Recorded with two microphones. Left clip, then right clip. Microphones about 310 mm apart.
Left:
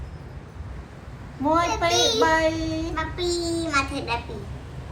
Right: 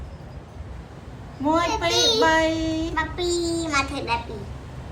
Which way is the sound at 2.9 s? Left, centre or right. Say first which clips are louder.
Right 2 dB; centre.